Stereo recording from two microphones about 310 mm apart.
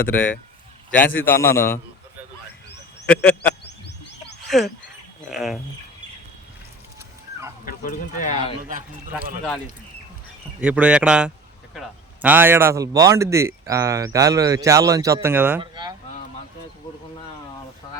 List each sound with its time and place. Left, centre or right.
0.9 s a man's voice: centre
3.1 s speech: centre
4.4 s a sound: centre
5.3 s speech: centre
7.6 s speech: left
10.6 s speech: centre